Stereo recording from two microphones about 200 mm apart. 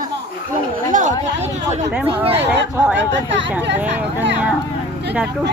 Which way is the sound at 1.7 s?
30° right (ahead or behind).